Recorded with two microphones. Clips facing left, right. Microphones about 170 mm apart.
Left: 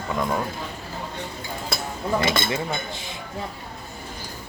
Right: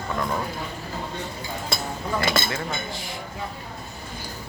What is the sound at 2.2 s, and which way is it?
Speech, 20° left (ahead or behind).